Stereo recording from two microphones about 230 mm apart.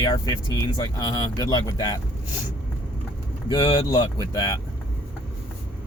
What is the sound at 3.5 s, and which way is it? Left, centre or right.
Speech, centre.